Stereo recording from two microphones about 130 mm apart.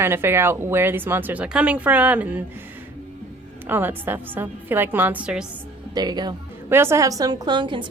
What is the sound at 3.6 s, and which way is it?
A woman's voice, 15° right (ahead or behind).